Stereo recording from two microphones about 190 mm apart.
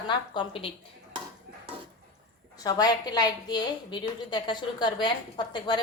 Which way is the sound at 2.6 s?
20° left (ahead or behind).